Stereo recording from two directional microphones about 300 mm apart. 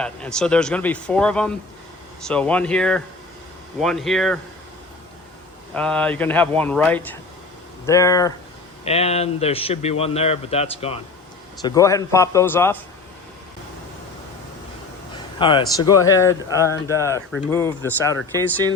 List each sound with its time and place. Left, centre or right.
0.0 s speech: centre
5.7 s a man's voice: centre
15.1 s speech: centre